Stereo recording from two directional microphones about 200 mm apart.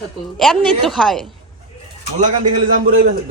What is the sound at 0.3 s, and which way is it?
Speech, centre (ahead or behind).